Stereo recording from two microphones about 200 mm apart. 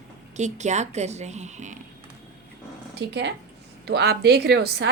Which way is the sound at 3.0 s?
60° right (ahead or behind).